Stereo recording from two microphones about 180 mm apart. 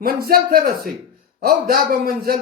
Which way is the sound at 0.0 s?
55° right (ahead or behind).